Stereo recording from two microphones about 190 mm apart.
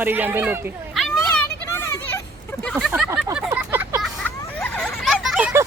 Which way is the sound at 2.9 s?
10° right (ahead or behind).